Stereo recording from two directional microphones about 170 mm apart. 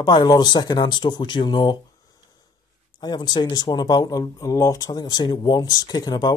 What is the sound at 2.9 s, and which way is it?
Speech, 25° left (ahead or behind).